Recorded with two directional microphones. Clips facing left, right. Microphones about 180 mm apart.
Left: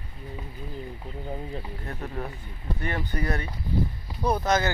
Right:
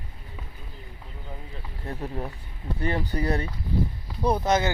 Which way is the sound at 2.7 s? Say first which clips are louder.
Right 4 dB; 30° right (ahead or behind).